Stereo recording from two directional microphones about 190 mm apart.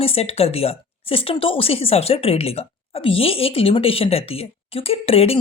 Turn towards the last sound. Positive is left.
turn(degrees=30)  # may be behind; listen again after turning